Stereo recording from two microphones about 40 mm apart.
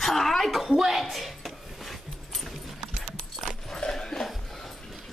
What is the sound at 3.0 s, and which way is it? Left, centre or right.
Keys jangling, centre.